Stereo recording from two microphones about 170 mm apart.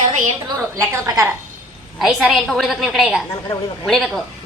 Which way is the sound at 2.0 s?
Centre (ahead or behind).